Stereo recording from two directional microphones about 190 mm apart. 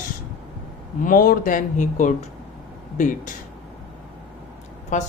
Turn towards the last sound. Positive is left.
turn(degrees=40)  # may be behind; listen again after turning